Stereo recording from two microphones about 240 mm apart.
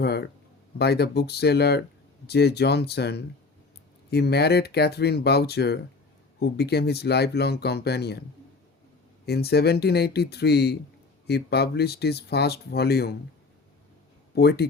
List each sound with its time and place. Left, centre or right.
0.0 s speech: left
9.2 s speech: left
14.3 s speech: left